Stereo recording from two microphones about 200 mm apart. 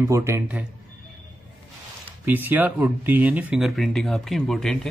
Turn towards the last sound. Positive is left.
turn(degrees=0)  # may be behind; listen again after turning